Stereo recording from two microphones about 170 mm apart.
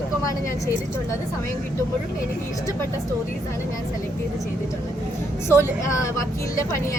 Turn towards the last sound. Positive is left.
turn(degrees=15)  # may be behind; listen again after turning